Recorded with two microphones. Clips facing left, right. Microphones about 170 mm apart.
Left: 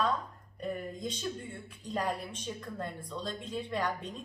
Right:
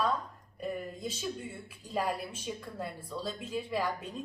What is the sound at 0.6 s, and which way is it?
A woman's voice, 5° right (ahead or behind).